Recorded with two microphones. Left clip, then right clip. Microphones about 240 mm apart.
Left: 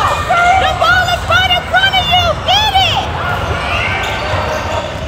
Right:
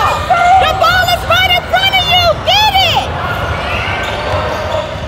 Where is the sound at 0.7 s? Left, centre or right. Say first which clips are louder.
Right 1 dB; right.